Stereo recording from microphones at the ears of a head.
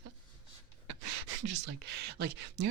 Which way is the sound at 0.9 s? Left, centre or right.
Right.